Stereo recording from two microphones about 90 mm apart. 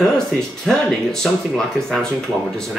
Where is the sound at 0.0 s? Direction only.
5° left (ahead or behind).